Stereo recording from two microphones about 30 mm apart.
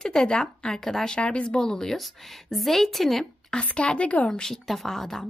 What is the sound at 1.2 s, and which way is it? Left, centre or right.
Speech, left.